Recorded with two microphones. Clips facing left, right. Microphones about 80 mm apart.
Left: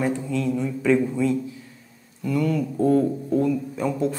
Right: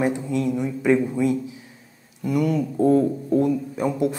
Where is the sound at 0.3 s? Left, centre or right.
Centre.